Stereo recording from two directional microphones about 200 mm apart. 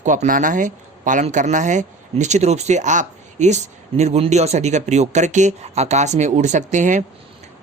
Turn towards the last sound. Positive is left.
turn(degrees=-40)  # may be behind; listen again after turning